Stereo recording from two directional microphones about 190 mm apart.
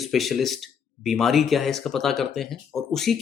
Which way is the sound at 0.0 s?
Centre (ahead or behind).